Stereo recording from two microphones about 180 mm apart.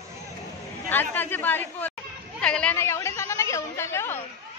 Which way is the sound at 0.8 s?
10° left (ahead or behind).